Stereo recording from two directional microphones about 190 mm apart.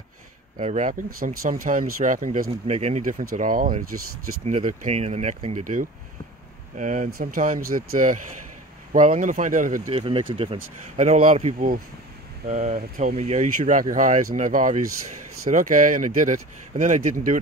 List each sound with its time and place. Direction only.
0.6 s speech: 40° right (ahead or behind)
2.6 s speech: 35° right (ahead or behind)
9.9 s speech: 30° right (ahead or behind)